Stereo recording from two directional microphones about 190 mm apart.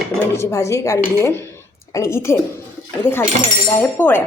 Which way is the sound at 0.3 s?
15° left (ahead or behind).